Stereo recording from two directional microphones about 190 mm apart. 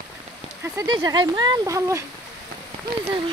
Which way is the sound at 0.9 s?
20° right (ahead or behind).